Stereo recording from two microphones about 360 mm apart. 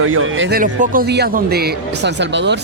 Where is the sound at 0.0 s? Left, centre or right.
Right.